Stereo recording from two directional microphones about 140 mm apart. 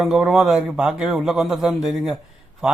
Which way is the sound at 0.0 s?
5° right (ahead or behind).